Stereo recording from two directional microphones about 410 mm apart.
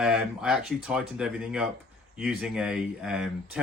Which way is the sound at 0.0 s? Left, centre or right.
Centre.